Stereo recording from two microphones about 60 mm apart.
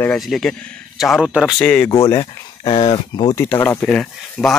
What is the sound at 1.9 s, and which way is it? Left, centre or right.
Speech, left.